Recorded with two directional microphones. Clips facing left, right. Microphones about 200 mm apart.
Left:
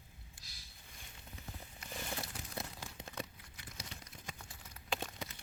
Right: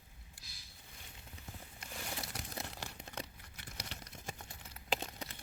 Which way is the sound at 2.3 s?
75° right (ahead or behind).